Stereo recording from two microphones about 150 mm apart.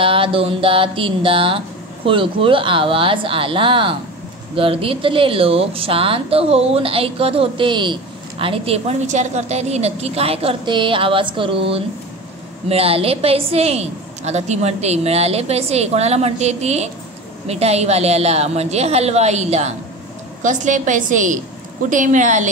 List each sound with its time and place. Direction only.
0.0 s a woman's voice: 35° right (ahead or behind); by 22.5 s 55° right (ahead or behind)